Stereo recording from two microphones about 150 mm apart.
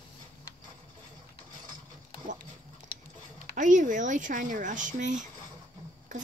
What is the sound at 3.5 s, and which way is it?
Speech, 55° right (ahead or behind).